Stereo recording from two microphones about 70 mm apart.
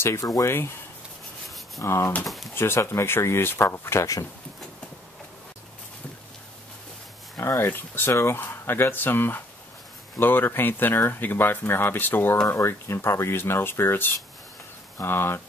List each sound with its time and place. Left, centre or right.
0.0 s speech: left
0.5 s speech: left
1.8 s speech: left
2.2 s pigeon: centre
2.5 s speech: left
7.3 s speech: left
12.4 s speech: left